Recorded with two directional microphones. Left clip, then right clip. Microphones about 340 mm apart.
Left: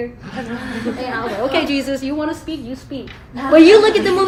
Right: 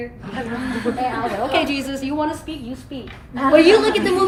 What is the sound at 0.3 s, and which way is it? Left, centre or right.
Chuckle, centre.